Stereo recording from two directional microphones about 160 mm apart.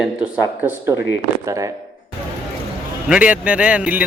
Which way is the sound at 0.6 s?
10° right (ahead or behind).